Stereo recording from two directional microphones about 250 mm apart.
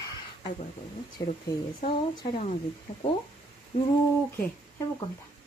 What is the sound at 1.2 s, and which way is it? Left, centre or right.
Speech, centre.